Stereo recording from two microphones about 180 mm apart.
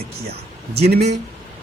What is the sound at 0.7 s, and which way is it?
Speech, 65° right (ahead or behind).